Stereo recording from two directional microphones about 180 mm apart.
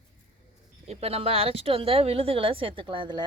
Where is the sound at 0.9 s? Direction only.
35° right (ahead or behind).